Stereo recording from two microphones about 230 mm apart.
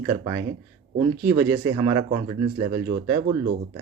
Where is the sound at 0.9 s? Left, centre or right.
Centre.